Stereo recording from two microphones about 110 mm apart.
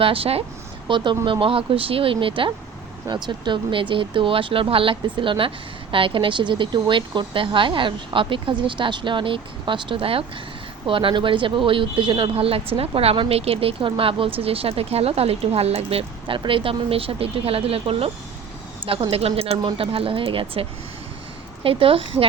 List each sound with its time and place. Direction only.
0.0 s speech: 55° right (ahead or behind)
0.9 s a woman's voice: 45° right (ahead or behind)